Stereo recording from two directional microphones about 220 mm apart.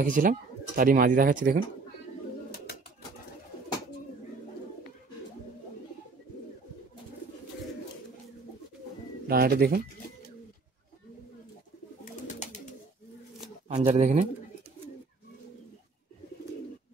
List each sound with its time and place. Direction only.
0.0 s speech: 40° right (ahead or behind)
9.3 s speech: 45° right (ahead or behind)
12.0 s bird: 35° left (ahead or behind)
13.7 s speech: 35° right (ahead or behind)